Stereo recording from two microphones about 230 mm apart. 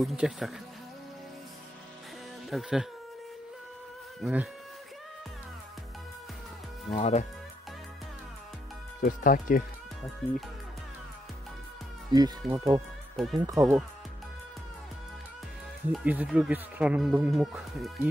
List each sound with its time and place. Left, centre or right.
0.0 s speech: centre
2.5 s speech: centre
4.2 s speech: centre
6.9 s speech: left
9.0 s speech: left
10.2 s speech: centre
12.1 s speech: centre
13.1 s speech: centre
13.4 s speech: centre
15.9 s speech: centre